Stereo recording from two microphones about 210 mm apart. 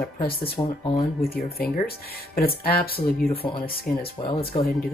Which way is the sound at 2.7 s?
45° left (ahead or behind).